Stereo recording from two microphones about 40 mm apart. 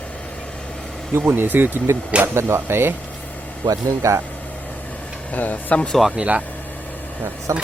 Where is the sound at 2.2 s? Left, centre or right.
Right.